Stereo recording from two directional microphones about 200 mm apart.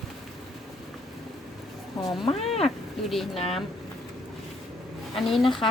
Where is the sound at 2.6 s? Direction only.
Centre (ahead or behind).